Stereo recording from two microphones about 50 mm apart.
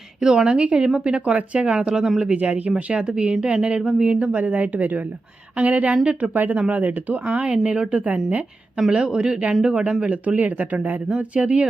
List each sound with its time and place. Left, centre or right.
0.2 s a woman's voice: centre
0.4 s speech: right
7.3 s speech: centre